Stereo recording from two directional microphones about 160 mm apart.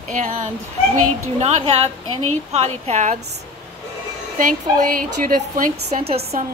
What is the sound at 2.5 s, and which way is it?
Speech, 40° right (ahead or behind).